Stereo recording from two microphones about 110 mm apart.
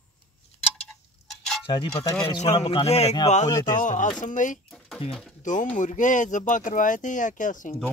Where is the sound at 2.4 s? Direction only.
85° left.